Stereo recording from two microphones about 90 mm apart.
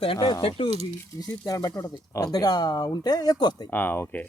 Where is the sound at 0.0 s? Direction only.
70° left (ahead or behind).